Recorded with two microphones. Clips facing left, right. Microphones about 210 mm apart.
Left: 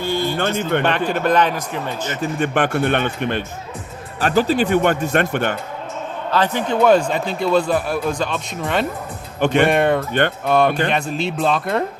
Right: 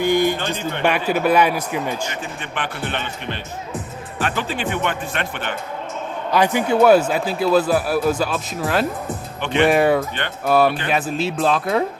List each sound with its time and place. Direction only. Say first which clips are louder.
0.0 s music: right 4 dB; 15° right (ahead or behind)
0.8 s a man's voice: even; 10° right (ahead or behind)
2.4 s speech: left 12 dB; 45° left (ahead or behind)
4.2 s speech: left 7 dB; 40° left (ahead or behind)
6.3 s speech: right 2 dB; 10° right (ahead or behind)
9.4 s speech: left 3 dB; 45° left (ahead or behind)
9.6 s speech: right 1 dB; 5° right (ahead or behind)